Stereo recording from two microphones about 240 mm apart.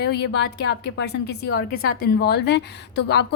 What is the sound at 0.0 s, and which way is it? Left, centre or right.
A woman's voice, left.